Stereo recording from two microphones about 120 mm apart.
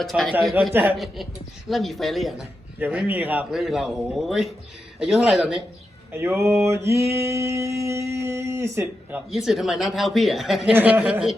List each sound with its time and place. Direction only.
0.0 s speech: centre (ahead or behind)
0.7 s speech: 15° right (ahead or behind)
0.9 s speech: centre (ahead or behind)
3.5 s speech: centre (ahead or behind)
6.1 s a sound: 20° right (ahead or behind)
9.3 s speech: centre (ahead or behind)
10.8 s speech: 15° right (ahead or behind)